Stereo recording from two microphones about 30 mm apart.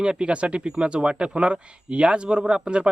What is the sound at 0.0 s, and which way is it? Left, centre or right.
Speech, right.